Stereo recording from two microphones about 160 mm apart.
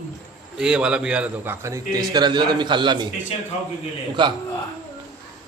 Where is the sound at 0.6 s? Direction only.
5° right (ahead or behind).